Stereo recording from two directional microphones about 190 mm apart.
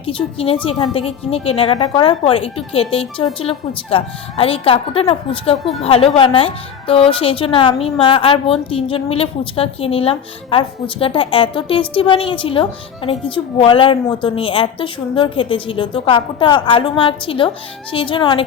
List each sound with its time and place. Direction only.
0.0 s a woman's voice: 30° left (ahead or behind)